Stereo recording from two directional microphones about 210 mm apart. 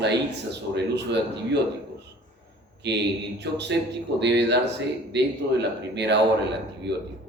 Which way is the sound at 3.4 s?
55° right (ahead or behind).